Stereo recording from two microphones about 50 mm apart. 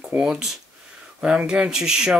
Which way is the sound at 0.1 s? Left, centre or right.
Right.